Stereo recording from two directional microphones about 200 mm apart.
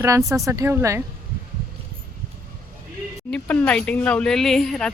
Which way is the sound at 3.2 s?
5° left (ahead or behind).